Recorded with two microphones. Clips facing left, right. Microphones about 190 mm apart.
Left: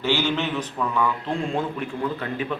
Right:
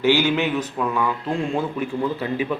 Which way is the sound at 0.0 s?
10° right (ahead or behind).